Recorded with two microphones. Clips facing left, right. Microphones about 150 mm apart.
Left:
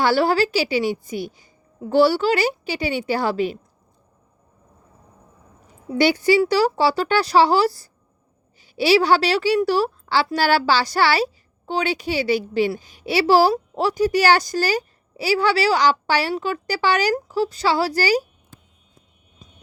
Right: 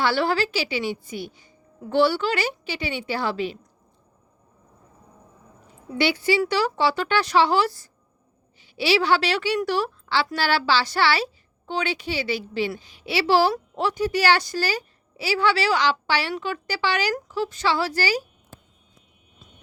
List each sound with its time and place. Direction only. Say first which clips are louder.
0.0 s a woman's voice: left 4 dB; 40° left (ahead or behind)
6.0 s a woman's voice: left 5 dB; 40° left (ahead or behind)